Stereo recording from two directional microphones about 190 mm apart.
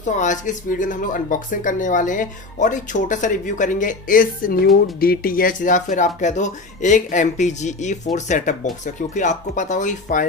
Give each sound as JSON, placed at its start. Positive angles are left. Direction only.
{"t": 0.0, "sound": "speech", "side_deg": 40}